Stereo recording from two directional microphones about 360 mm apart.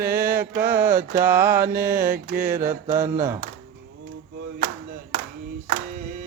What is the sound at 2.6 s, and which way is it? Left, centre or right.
Mantra, centre.